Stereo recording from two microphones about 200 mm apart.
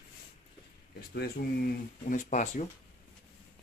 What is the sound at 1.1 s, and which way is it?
Speech, 50° left (ahead or behind).